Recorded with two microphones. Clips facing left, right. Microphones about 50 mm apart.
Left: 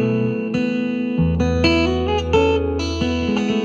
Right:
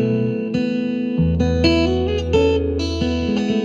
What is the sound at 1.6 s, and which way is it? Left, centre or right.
Music, left.